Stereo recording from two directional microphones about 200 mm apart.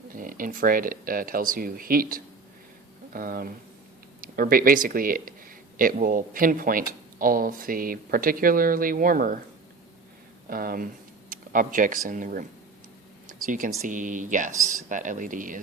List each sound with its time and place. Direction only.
0.1 s speech: 45° right (ahead or behind)
10.5 s speech: 45° right (ahead or behind)
11.3 s a sound: 40° right (ahead or behind)
12.0 s speech: 40° right (ahead or behind)
13.2 s a sound: 40° right (ahead or behind)
13.8 s speech: 40° right (ahead or behind)